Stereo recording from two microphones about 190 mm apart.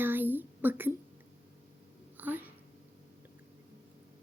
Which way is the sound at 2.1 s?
10° right (ahead or behind).